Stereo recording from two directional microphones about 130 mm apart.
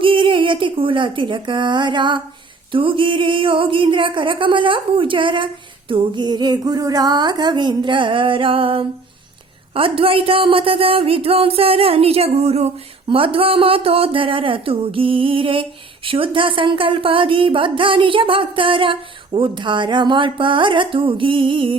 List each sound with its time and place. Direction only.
0.0 s speech: 40° right (ahead or behind)
2.7 s music: 40° right (ahead or behind)
9.7 s a woman's voice: 45° right (ahead or behind)
13.1 s a woman's voice: 45° right (ahead or behind)
16.0 s music: 40° right (ahead or behind)